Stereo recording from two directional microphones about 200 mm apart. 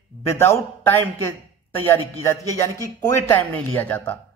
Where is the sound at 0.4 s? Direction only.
15° left (ahead or behind).